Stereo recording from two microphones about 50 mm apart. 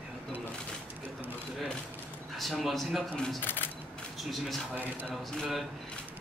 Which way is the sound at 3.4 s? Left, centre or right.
Left.